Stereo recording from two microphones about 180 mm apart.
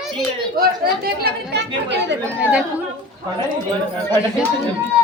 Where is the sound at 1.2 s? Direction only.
65° right (ahead or behind).